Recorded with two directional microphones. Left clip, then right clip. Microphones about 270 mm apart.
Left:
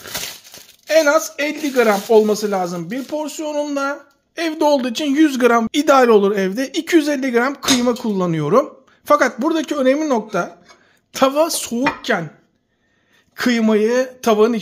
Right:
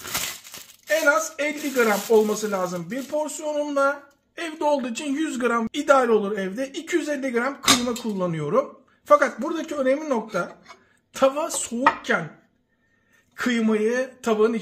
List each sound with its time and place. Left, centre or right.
0.8 s speech: left
13.4 s speech: left